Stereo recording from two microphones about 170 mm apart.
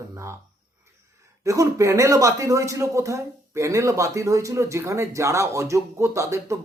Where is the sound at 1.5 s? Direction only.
20° right (ahead or behind).